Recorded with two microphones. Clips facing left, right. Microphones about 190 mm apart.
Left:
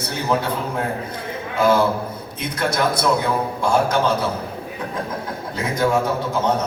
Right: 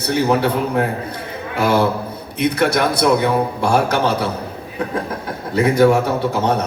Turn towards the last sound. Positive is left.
turn(degrees=-70)  # may be behind; listen again after turning